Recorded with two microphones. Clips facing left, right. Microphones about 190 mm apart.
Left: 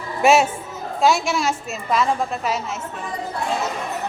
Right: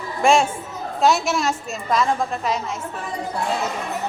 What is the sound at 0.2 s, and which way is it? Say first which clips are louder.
A woman's voice: left 1 dB; 5° left (ahead or behind).